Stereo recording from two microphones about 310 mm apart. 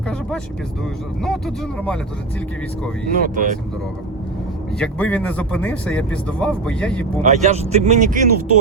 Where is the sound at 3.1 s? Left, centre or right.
Right.